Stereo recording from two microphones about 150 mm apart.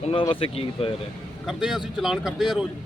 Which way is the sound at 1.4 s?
5° right (ahead or behind).